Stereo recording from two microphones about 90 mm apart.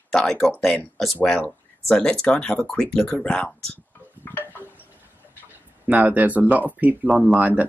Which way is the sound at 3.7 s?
20° left (ahead or behind).